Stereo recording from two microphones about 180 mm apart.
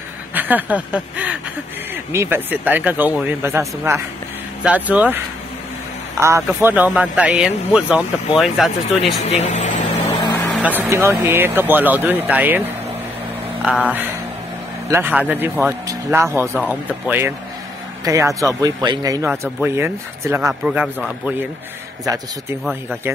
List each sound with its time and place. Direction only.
0.3 s speech: 10° right (ahead or behind)
9.2 s speech: 40° left (ahead or behind)
10.0 s vehicle: 20° left (ahead or behind)
10.5 s speech: 10° right (ahead or behind)
14.9 s speech: 10° right (ahead or behind)